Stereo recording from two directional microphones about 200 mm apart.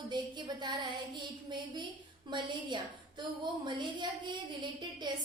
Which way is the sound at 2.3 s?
25° right (ahead or behind).